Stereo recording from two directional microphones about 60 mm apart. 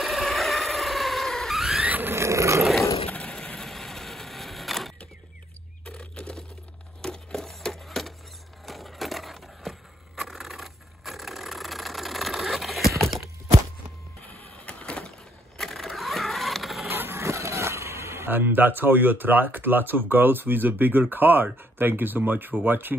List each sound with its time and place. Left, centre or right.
0.0 s vehicle: centre
1.8 s a sound: right
2.1 s dog: right
3.2 s wood: centre
3.5 s vehicle: centre
5.9 s a sound: centre
14.2 s printer: left
15.5 s a sound: centre
16.9 s vehicle: right
17.2 s vehicle: right
18.3 s speech: right